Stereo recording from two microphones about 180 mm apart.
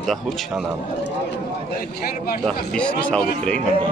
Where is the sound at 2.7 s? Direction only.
5° left (ahead or behind).